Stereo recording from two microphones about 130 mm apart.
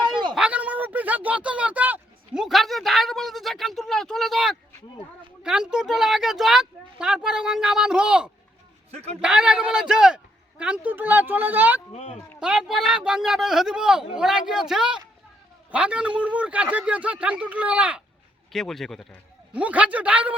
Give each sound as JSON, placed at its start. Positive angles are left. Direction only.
{"t": 0.3, "sound": "a sound", "side_deg": -10}
{"t": 5.4, "sound": "a man's voice", "side_deg": -5}
{"t": 11.9, "sound": "speech", "side_deg": 50}
{"t": 12.4, "sound": "a man's voice", "side_deg": -5}
{"t": 18.5, "sound": "speech", "side_deg": 0}
{"t": 19.5, "sound": "a man's voice", "side_deg": -10}